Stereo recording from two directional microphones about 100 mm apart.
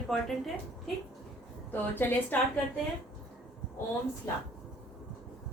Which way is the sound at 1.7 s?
20° left (ahead or behind).